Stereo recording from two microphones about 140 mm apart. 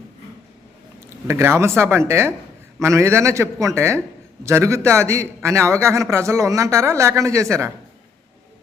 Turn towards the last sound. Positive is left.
turn(degrees=-20)  # may be behind; listen again after turning